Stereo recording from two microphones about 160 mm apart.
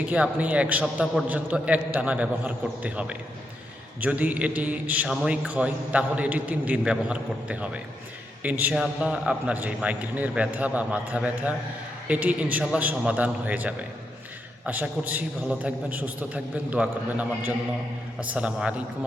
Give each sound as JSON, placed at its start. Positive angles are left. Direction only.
{"t": 0.0, "sound": "a man's voice", "side_deg": -10}